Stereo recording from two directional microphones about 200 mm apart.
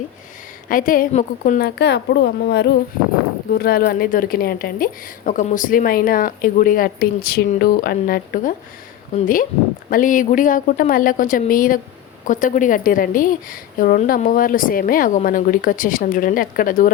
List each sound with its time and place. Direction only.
0.7 s a woman's voice: 45° left (ahead or behind)